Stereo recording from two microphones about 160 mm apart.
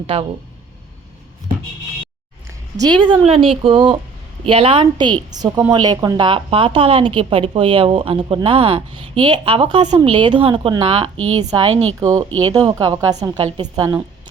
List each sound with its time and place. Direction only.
0.1 s speech: 40° right (ahead or behind)
2.7 s a woman's voice: 25° right (ahead or behind)